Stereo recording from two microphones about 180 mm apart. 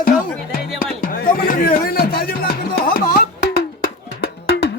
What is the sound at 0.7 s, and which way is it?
Music, 50° left (ahead or behind).